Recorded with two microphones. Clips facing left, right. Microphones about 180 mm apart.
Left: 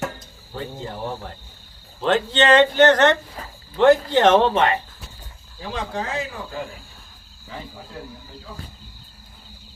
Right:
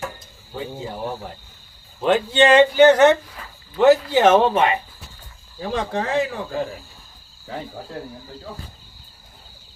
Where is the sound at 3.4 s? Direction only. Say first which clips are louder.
Left 3 dB; 35° left (ahead or behind).